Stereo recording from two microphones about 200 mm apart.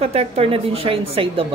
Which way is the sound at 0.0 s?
30° right (ahead or behind).